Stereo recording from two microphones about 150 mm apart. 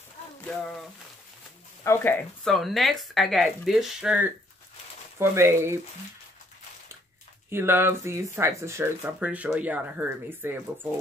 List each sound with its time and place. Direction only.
0.5 s speech: centre (ahead or behind)
1.9 s speech: 15° left (ahead or behind)
2.4 s speech: centre (ahead or behind); by 5.8 s 15° right (ahead or behind)
7.4 s speech: 15° right (ahead or behind)